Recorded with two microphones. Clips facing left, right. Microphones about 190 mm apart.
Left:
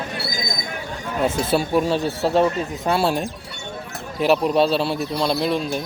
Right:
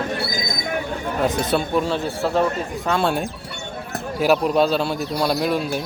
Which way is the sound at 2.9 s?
5° left (ahead or behind).